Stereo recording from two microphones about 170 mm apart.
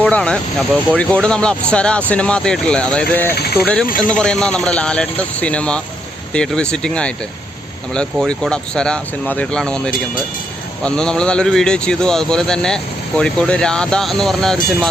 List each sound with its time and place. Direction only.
0.0 s speech: 5° left (ahead or behind)
3.3 s speech: 70° left (ahead or behind)
4.1 s speech: 5° left (ahead or behind)
8.3 s speech: 5° left (ahead or behind)